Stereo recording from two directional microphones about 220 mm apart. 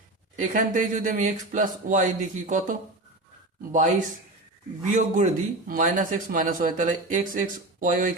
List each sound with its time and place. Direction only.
0.3 s a man's voice: 35° right (ahead or behind)
4.9 s a man's voice: 35° right (ahead or behind)